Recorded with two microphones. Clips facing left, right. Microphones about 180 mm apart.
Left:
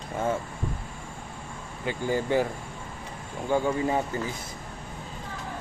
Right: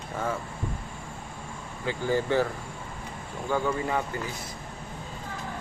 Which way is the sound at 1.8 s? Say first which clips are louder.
Right 1 dB; 15° left (ahead or behind).